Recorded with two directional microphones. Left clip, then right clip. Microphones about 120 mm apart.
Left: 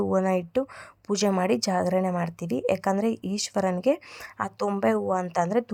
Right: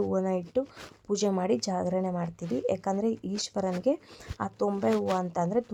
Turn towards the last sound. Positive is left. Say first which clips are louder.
# left 4 dB
turn(degrees=25)  # may be behind; listen again after turning